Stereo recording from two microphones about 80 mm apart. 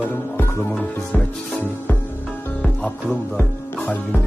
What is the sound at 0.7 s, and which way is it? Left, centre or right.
Music, centre.